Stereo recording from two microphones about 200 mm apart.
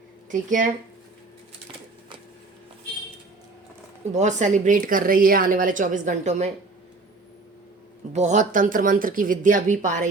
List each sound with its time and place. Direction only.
0.3 s a woman's voice: 40° right (ahead or behind)
4.1 s a woman's voice: 35° right (ahead or behind)
8.1 s a woman's voice: 35° right (ahead or behind)